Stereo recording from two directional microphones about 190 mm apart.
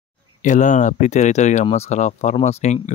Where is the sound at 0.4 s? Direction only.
40° left (ahead or behind).